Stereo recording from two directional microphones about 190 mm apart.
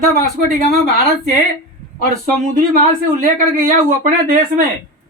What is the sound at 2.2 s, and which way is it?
Speech, 45° right (ahead or behind).